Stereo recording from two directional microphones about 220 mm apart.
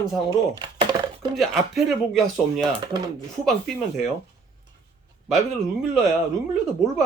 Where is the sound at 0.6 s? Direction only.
25° right (ahead or behind).